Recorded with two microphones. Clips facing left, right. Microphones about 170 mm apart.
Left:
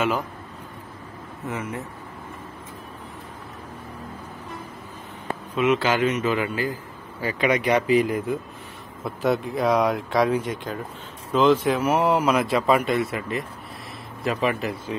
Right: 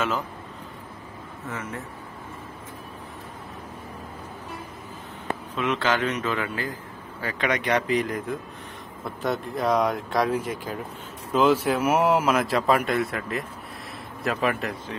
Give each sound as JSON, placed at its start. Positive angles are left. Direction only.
{"t": 1.5, "sound": "speech", "side_deg": 15}
{"t": 5.5, "sound": "speech", "side_deg": 10}